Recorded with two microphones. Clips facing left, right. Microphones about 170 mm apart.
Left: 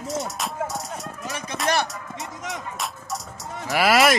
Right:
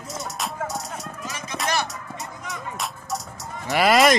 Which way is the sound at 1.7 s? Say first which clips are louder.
Left 3 dB; 55° left (ahead or behind).